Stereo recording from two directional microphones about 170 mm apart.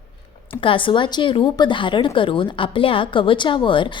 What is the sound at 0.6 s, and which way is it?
A woman's voice, 30° left (ahead or behind).